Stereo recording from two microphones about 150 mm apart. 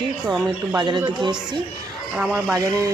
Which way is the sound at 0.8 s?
30° right (ahead or behind).